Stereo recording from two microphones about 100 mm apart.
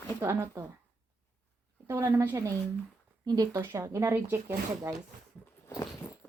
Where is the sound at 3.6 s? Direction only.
30° right (ahead or behind).